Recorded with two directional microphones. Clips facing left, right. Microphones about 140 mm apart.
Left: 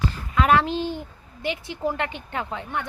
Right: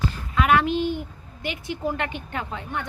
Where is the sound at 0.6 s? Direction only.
30° left (ahead or behind).